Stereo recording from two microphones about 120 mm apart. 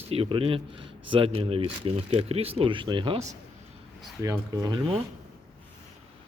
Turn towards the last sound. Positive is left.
turn(degrees=-30)  # may be behind; listen again after turning